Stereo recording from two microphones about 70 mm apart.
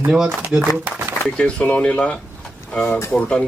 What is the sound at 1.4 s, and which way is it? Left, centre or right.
A man's voice, centre.